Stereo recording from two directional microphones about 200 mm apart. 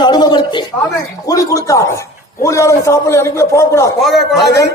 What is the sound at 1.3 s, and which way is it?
A man's voice, 15° left (ahead or behind).